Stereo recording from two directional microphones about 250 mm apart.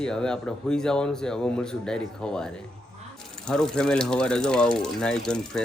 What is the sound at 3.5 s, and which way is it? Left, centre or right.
Speech, centre.